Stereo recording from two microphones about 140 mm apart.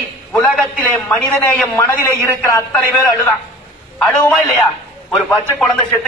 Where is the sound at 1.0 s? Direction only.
20° left (ahead or behind).